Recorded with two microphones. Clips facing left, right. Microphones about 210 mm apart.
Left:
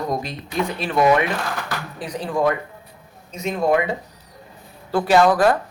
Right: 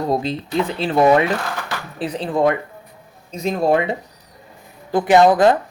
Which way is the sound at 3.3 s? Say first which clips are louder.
Right 2 dB; 35° right (ahead or behind).